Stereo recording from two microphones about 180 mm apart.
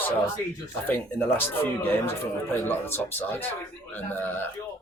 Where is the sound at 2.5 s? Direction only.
10° left (ahead or behind).